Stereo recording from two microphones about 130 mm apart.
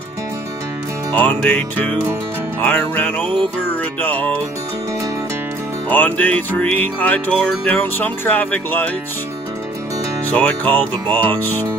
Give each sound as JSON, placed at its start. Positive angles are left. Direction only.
{"t": 1.1, "sound": "music", "side_deg": 15}
{"t": 5.9, "sound": "music", "side_deg": 10}
{"t": 10.3, "sound": "music", "side_deg": 10}